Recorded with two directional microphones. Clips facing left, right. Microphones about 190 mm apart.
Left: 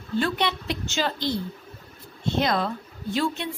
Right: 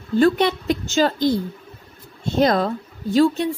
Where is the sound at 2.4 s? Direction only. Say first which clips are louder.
Right 8 dB; 40° right (ahead or behind).